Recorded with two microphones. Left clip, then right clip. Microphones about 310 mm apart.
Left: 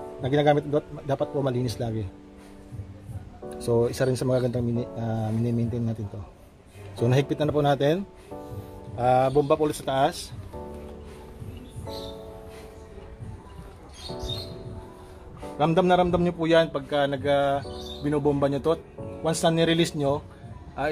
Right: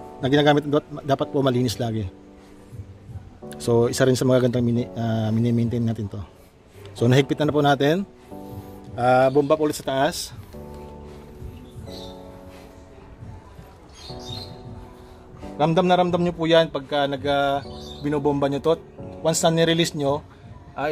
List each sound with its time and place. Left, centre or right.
0.2 s a man's voice: right
3.5 s a man's voice: right
7.0 s a man's voice: right
15.5 s a man's voice: right